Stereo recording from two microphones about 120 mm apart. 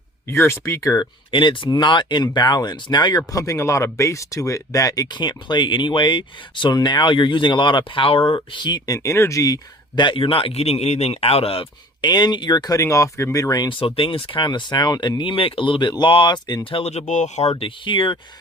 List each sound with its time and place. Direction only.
0.3 s speech: 20° left (ahead or behind)
1.3 s speech: 45° left (ahead or behind)
13.7 s speech: 45° left (ahead or behind)
15.2 s speech: 50° left (ahead or behind)
16.9 s speech: 80° left
17.6 s speech: 45° left (ahead or behind)